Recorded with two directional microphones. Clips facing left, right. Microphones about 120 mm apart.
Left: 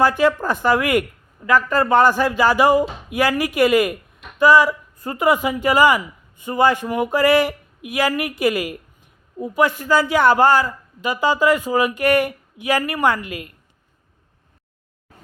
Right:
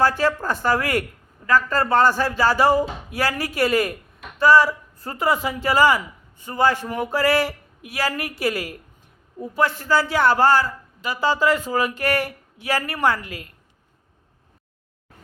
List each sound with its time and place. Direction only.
0.0 s a man's voice: 15° left (ahead or behind)